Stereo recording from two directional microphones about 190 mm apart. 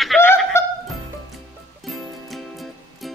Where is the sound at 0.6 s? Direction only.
15° left (ahead or behind).